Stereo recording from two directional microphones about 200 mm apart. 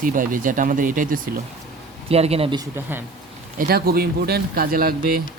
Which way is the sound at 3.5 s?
50° right (ahead or behind).